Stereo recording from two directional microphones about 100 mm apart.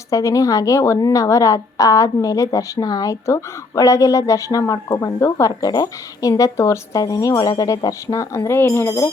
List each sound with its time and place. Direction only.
0.1 s a woman's voice: 30° left (ahead or behind)